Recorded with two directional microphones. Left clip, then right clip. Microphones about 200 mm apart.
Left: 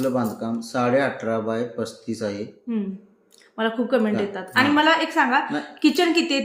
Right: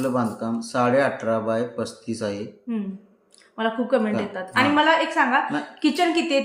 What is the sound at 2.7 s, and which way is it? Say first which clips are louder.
A woman's voice: left 3 dB; 20° left (ahead or behind).